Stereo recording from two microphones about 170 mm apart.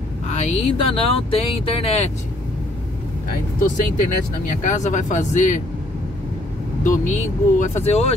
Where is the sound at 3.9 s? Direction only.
50° left (ahead or behind).